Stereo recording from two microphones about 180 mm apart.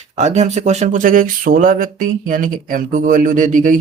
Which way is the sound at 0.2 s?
40° right (ahead or behind).